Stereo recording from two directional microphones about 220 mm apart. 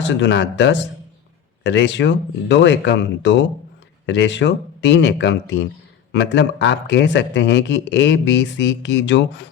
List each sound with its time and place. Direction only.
0.1 s a man's voice: 55° left (ahead or behind)